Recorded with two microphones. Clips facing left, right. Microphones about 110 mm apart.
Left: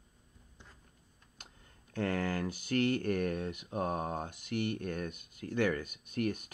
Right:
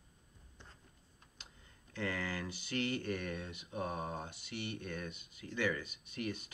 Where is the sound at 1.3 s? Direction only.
50° left (ahead or behind).